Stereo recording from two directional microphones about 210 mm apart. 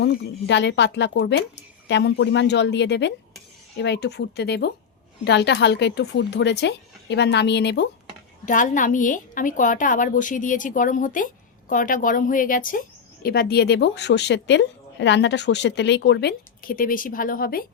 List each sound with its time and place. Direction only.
0.0 s a woman's voice: 55° left (ahead or behind)
8.4 s a woman's voice: 35° left (ahead or behind)